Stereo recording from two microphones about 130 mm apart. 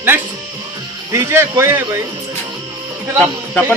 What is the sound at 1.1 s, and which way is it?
Speech, 25° right (ahead or behind).